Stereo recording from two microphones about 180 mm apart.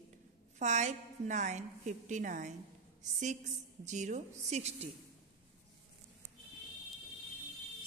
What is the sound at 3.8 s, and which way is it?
A woman's voice, 40° right (ahead or behind).